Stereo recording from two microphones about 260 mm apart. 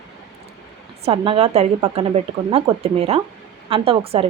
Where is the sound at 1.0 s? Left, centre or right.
Right.